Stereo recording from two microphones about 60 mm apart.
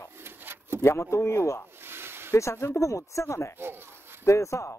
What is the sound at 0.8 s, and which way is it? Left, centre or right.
Speech, left.